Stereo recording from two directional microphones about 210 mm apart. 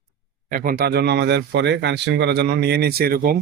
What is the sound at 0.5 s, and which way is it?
Speech, 45° right (ahead or behind).